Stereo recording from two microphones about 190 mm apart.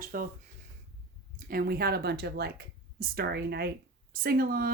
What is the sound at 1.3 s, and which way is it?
Speech, 50° right (ahead or behind).